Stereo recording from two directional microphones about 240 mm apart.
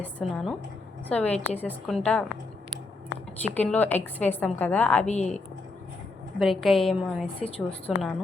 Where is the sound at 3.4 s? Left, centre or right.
Centre.